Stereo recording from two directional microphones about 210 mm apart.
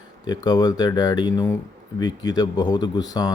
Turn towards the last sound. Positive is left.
turn(degrees=20)  # may be behind; listen again after turning